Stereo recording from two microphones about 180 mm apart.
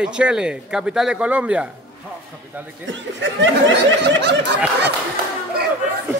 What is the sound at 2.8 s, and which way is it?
Speech, 90° right.